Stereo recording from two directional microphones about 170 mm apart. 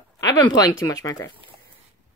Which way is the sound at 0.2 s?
25° left (ahead or behind).